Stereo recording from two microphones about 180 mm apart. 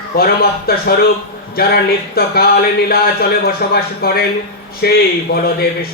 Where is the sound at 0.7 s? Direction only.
60° left (ahead or behind).